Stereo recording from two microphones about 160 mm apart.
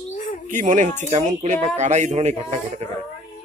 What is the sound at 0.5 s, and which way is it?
Speech, 50° right (ahead or behind).